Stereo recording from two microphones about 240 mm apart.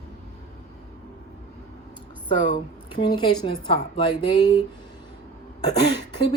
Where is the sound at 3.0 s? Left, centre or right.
Centre.